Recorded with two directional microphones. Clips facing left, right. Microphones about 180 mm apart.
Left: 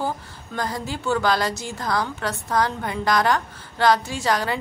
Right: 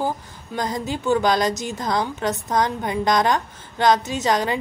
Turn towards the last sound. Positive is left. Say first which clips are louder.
# right 2 dB
turn(degrees=-20)  # may be behind; listen again after turning